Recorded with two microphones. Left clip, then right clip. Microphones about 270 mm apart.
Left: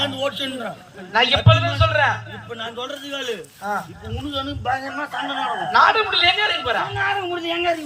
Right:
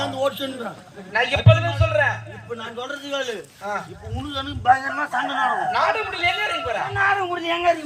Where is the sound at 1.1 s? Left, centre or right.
Right.